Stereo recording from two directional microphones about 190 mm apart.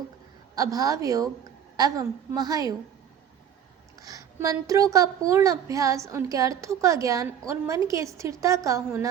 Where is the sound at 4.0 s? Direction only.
20° right (ahead or behind).